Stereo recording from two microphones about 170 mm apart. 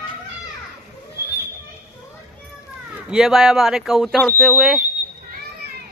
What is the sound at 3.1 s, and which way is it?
Speech, centre (ahead or behind).